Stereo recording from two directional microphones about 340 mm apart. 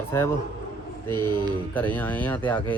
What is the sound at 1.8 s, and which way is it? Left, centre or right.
Speech, centre.